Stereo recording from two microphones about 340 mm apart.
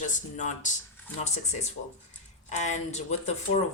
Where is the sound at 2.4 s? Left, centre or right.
Left.